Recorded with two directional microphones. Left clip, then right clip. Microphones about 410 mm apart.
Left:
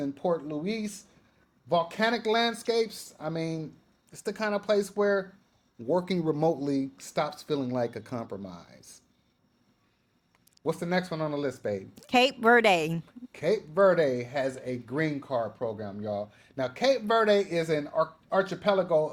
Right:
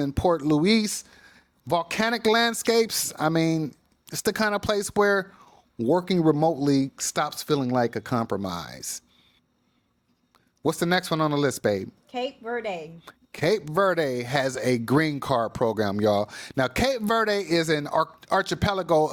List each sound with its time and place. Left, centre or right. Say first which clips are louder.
0.0 s speech: right 6 dB; right
1.6 s speech: right 2 dB; right
5.8 s speech: right 6 dB; right
10.6 s speech: right 5 dB; right
12.0 s a woman's voice: left 14 dB; left
13.1 s speech: right 4 dB; right